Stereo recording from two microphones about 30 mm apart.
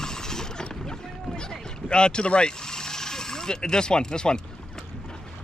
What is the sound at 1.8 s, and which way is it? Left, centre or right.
Speech, left.